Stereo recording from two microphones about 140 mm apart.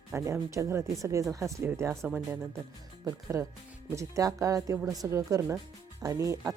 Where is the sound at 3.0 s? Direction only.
20° right (ahead or behind).